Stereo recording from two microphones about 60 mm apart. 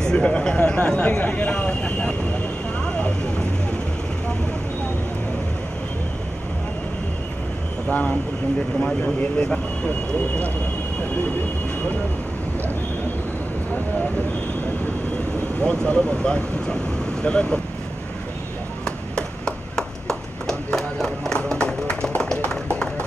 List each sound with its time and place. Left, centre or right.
0.0 s speech: centre
2.8 s vehicle: centre
7.9 s speech: left
15.6 s speech: centre
18.9 s a sound: centre
22.1 s music: centre